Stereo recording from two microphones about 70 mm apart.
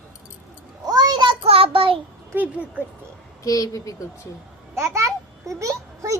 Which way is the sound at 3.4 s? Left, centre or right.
Left.